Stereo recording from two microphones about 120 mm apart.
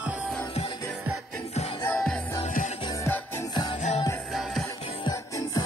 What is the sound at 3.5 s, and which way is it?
Music, 35° left (ahead or behind).